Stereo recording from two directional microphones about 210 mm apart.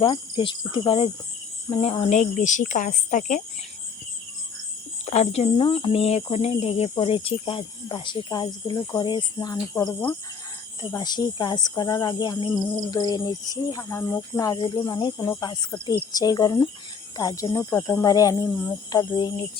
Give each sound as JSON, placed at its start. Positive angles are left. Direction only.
{"t": 0.0, "sound": "speech", "side_deg": 25}
{"t": 5.0, "sound": "speech", "side_deg": 30}